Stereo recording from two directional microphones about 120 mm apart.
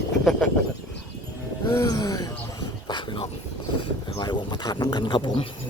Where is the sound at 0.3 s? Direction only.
5° left (ahead or behind).